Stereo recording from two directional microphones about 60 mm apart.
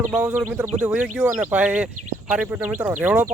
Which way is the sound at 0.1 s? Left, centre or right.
Right.